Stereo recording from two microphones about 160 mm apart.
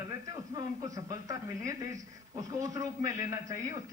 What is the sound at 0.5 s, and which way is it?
A man's voice, 20° right (ahead or behind).